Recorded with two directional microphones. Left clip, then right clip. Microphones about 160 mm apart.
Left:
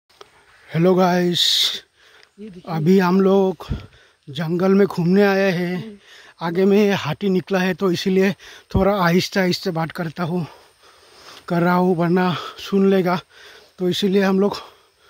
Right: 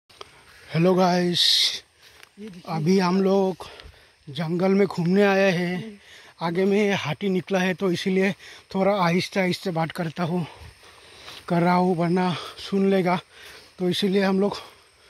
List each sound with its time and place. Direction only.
0.2 s speech: 35° left (ahead or behind)
5.2 s speech: 25° left (ahead or behind)